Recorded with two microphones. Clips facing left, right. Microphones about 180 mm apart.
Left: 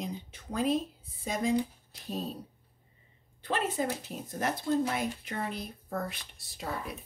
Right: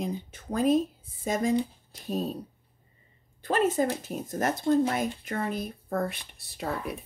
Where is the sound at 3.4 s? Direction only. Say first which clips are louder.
Right 6 dB; 45° right (ahead or behind).